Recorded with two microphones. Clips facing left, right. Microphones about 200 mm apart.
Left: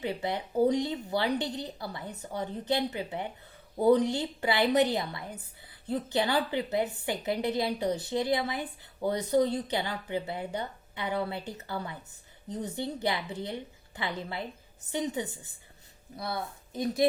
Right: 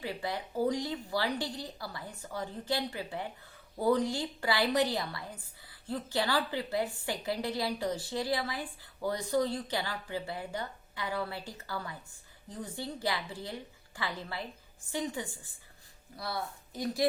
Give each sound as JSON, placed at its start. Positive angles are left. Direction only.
{"t": 0.0, "sound": "a woman's voice", "side_deg": 20}